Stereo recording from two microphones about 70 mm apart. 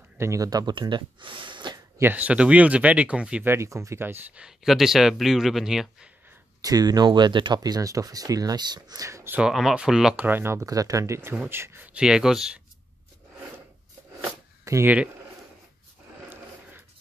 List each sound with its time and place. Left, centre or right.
0.2 s speech: right
2.1 s speech: centre
3.4 s speech: right
4.4 s speech: centre
6.6 s speech: right
9.5 s speech: centre
10.1 s speech: right
10.7 s speech: right
11.4 s speech: right
11.8 s speech: centre
14.6 s a sound: right